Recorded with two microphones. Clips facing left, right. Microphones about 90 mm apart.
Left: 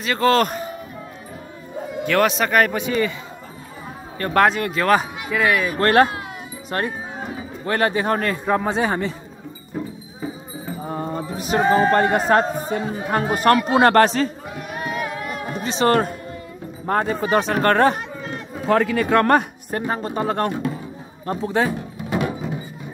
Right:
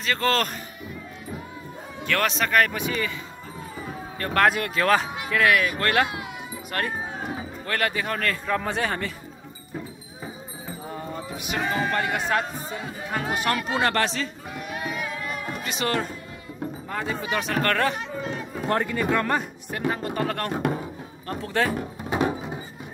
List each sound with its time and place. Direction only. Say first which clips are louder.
0.0 s a man's voice: left 6 dB; 10° left (ahead or behind)
2.0 s a man's voice: left 6 dB; 15° left (ahead or behind)
2.7 s speech: left 6 dB; 30° left (ahead or behind)
4.2 s a man's voice: left 5 dB; 10° left (ahead or behind)
4.5 s speech: left 3 dB; centre (ahead or behind)
4.9 s speech: left 3 dB; 15° left (ahead or behind)
5.7 s speech: left 7 dB; 35° left (ahead or behind)
6.7 s a man's voice: left 4 dB; 30° left (ahead or behind)
10.8 s a man's voice: left 7 dB; 40° left (ahead or behind)
15.5 s music: left 11 dB; 30° left (ahead or behind)
15.9 s a man's voice: left 8 dB; 50° left (ahead or behind); by 18.0 s 35° left (ahead or behind)
18.8 s speech: left 7 dB; 85° left; by 19.4 s 65° left (ahead or behind)
19.9 s a man's voice: left 3 dB; 30° left (ahead or behind)
22.1 s music: left 1 dB; 25° right (ahead or behind)